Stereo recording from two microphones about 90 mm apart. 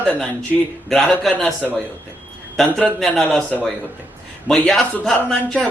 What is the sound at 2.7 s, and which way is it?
Speech, 10° left (ahead or behind).